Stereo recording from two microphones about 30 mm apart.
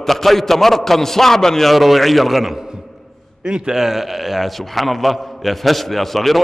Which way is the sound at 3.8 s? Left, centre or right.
Centre.